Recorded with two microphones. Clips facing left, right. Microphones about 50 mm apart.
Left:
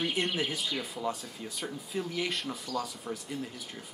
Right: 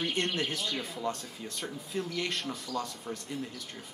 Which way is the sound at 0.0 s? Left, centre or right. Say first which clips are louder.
Left 1 dB; centre.